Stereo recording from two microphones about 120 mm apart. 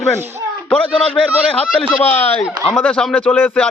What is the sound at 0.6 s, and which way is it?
Speech, 10° left (ahead or behind).